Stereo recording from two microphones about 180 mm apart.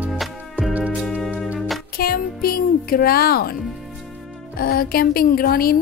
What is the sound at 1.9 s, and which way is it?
Music, 55° left (ahead or behind).